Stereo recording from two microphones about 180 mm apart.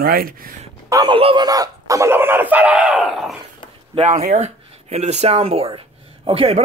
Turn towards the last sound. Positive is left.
turn(degrees=-30)  # may be behind; listen again after turning